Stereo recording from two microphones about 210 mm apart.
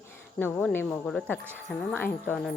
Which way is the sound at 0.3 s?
10° left (ahead or behind).